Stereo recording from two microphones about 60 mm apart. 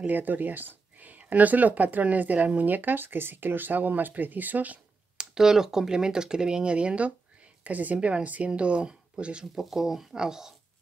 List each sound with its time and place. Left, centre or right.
0.0 s speech: right
5.1 s speech: centre
9.6 s speech: centre